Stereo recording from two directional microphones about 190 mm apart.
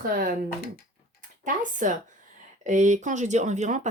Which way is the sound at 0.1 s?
45° right (ahead or behind).